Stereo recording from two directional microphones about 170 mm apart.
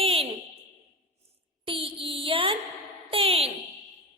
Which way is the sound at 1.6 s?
30° right (ahead or behind).